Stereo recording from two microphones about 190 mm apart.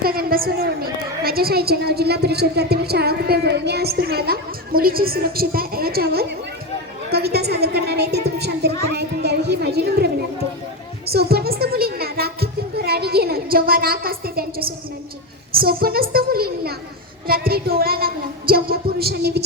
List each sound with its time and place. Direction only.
0.0 s a woman's voice: 50° right (ahead or behind)
11.0 s a sound: 55° right (ahead or behind)
15.5 s a woman's voice: 50° right (ahead or behind)